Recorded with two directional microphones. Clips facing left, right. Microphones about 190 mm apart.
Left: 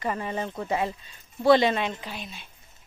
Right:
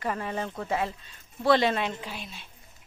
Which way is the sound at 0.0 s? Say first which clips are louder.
Left 1 dB; centre (ahead or behind).